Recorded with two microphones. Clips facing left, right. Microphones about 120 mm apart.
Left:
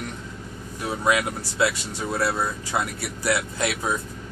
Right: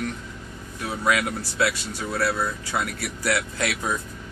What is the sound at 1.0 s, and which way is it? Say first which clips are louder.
Speech: even; 20° left (ahead or behind).